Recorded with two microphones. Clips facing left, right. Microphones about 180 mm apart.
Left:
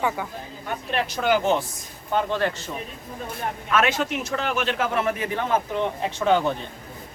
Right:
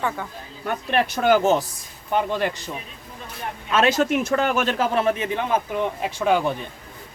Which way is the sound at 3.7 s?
30° right (ahead or behind).